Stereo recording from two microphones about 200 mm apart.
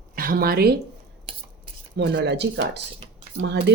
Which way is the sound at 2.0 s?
55° right (ahead or behind).